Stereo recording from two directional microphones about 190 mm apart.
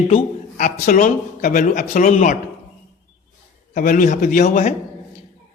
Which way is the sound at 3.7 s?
45° left (ahead or behind).